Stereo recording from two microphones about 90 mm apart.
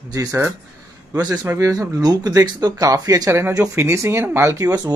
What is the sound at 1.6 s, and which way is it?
Speech, 45° right (ahead or behind).